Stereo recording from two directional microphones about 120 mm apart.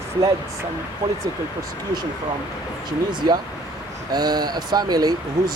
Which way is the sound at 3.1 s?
40° right (ahead or behind).